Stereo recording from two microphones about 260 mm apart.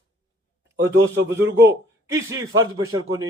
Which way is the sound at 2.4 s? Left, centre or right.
Right.